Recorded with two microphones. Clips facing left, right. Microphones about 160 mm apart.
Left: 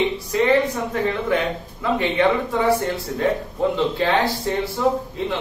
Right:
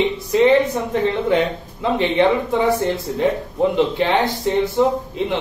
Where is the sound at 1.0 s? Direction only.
25° right (ahead or behind).